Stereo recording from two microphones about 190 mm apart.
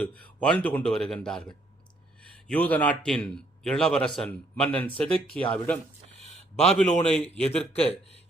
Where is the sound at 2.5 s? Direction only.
10° left (ahead or behind).